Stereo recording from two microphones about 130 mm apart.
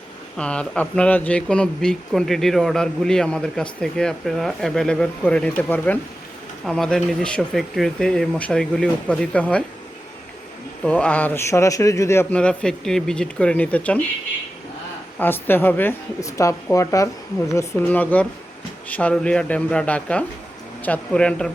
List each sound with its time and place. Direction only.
0.3 s speech: 10° left (ahead or behind)
10.8 s a man's voice: 10° left (ahead or behind)
12.4 s a woman's voice: 5° left (ahead or behind)
15.2 s a woman's voice: 15° left (ahead or behind)